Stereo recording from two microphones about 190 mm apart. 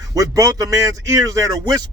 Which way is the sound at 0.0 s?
20° right (ahead or behind).